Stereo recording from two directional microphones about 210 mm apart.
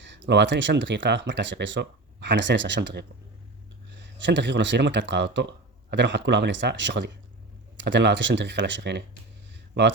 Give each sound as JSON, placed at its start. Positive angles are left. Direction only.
{"t": 0.0, "sound": "speech", "side_deg": -60}